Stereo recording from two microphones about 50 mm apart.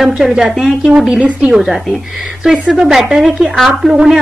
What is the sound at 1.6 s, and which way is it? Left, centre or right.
A woman's voice, centre.